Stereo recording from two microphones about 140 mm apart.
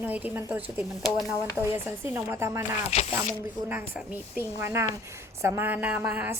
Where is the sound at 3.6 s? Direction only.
15° right (ahead or behind).